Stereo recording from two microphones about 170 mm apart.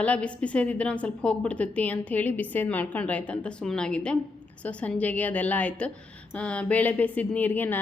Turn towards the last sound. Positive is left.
turn(degrees=10)  # may be behind; listen again after turning